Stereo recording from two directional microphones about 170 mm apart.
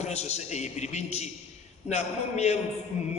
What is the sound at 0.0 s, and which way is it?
A man's voice, 40° left (ahead or behind).